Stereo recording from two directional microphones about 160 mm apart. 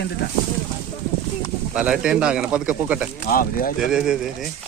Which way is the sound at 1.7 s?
5° right (ahead or behind).